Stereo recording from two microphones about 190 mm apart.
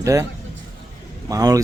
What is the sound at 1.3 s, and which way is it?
Speech, 20° right (ahead or behind).